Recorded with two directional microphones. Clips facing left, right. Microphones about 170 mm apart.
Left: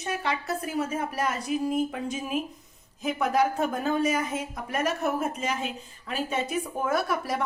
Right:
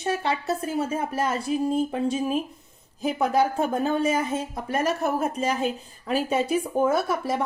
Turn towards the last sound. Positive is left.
turn(degrees=-25)  # may be behind; listen again after turning